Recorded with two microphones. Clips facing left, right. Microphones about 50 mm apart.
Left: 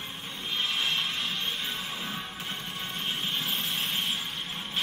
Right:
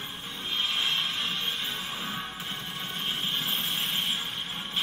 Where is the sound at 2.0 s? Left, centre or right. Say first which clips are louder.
Right 1 dB; centre.